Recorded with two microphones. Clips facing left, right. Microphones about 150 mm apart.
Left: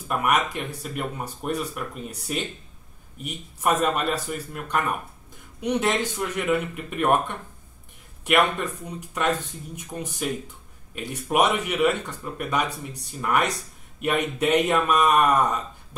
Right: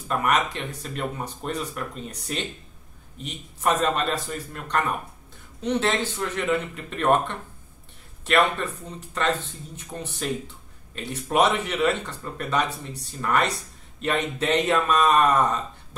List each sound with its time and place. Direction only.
0.1 s speech: 10° left (ahead or behind)